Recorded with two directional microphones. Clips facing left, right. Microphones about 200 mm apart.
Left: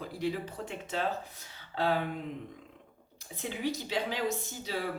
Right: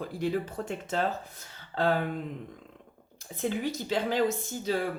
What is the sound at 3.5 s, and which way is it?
Speech, 50° right (ahead or behind).